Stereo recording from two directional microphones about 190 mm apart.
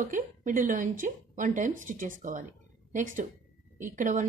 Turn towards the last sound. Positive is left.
turn(degrees=-40)  # may be behind; listen again after turning